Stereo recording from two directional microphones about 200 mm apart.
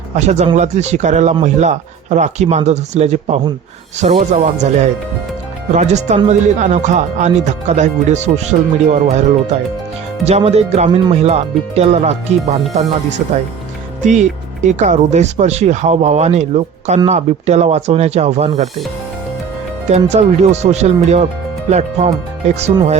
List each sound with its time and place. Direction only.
0.3 s speech: 35° right (ahead or behind)
10.2 s speech: 30° right (ahead or behind)
14.0 s speech: 35° right (ahead or behind)
20.1 s speech: 35° right (ahead or behind)